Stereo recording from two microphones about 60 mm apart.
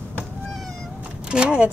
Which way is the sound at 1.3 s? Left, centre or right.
Centre.